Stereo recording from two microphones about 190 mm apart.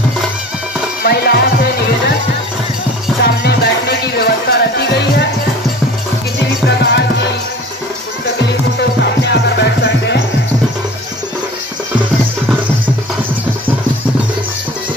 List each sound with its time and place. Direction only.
1.0 s music: 60° left (ahead or behind)
3.2 s music: 55° left (ahead or behind)
6.7 s music: 65° left (ahead or behind)
8.5 s music: 60° left (ahead or behind)